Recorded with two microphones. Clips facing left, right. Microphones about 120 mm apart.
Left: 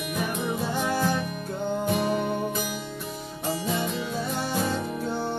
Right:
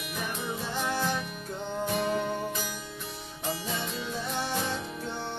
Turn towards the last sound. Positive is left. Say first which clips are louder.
# left 7 dB
turn(degrees=40)  # may be behind; listen again after turning